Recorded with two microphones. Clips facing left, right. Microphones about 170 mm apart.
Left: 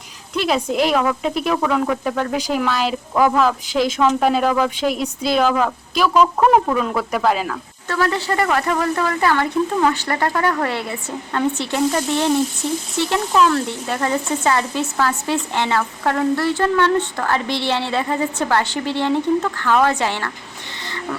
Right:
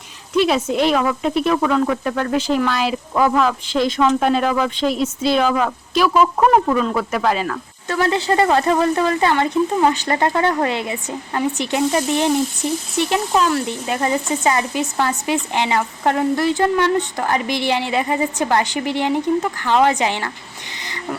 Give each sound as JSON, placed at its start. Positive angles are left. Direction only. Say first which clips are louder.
{"t": 0.3, "sound": "speech", "louder": "right 2 dB", "side_deg": 0}
{"t": 7.9, "sound": "a woman's voice", "louder": "right 2 dB", "side_deg": -20}
{"t": 20.8, "sound": "a sound", "louder": "even", "side_deg": -15}